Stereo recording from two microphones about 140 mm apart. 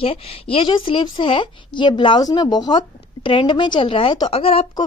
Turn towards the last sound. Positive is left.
turn(degrees=45)  # may be behind; listen again after turning